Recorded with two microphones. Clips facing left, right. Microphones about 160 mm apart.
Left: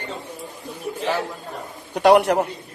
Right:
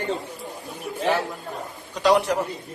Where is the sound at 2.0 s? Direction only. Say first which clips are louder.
Left 5 dB; 60° left (ahead or behind).